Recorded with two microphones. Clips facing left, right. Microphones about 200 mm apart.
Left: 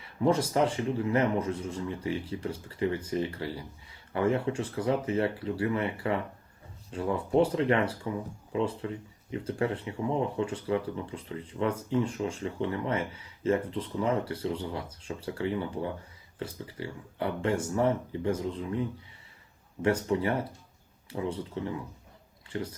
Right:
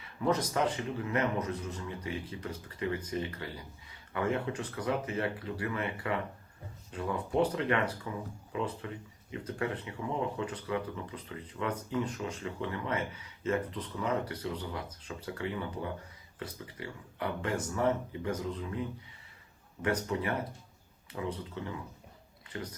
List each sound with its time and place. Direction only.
0.0 s speech: 30° left (ahead or behind)